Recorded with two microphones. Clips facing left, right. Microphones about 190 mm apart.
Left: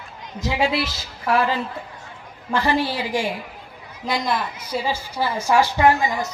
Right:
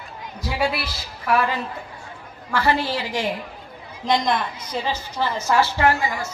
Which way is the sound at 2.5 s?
20° left (ahead or behind).